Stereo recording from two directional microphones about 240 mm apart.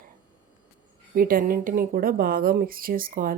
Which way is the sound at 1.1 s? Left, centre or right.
Right.